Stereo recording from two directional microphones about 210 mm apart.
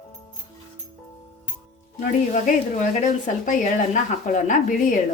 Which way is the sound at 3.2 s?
35° left (ahead or behind).